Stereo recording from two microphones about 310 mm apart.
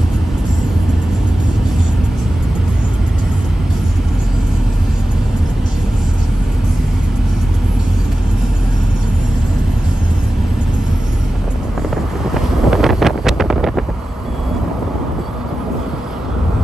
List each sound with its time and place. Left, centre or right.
12.4 s wind noise: centre